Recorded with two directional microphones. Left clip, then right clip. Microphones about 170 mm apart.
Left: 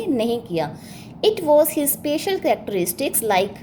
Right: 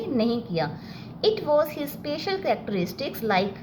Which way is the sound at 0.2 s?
45° left (ahead or behind).